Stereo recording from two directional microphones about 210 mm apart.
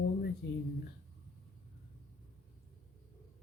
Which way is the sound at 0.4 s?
55° left (ahead or behind).